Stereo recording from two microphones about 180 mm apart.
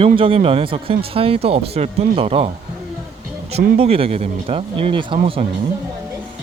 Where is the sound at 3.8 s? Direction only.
30° right (ahead or behind).